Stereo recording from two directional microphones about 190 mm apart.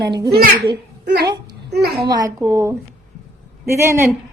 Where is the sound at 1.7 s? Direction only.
60° right (ahead or behind).